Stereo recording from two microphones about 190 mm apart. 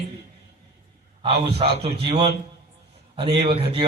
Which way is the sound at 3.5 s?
30° right (ahead or behind).